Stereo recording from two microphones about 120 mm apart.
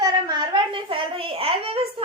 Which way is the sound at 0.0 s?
35° right (ahead or behind).